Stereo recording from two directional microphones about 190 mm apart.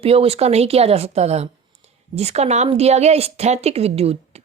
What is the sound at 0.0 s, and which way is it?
A woman's voice, 30° right (ahead or behind).